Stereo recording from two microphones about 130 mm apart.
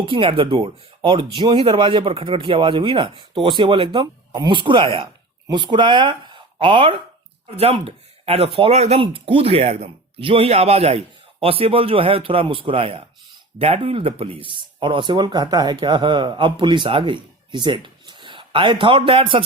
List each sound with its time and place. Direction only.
0.0 s speech: 40° right (ahead or behind)